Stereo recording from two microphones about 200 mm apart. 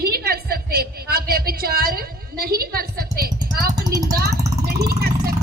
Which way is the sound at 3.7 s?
20° right (ahead or behind).